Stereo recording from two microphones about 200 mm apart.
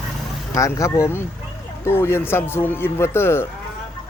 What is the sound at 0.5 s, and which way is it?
Speech, 15° left (ahead or behind).